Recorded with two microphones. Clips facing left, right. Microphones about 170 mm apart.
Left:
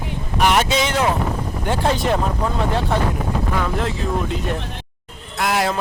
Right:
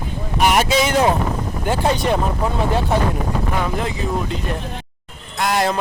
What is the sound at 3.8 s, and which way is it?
A man's voice, centre (ahead or behind).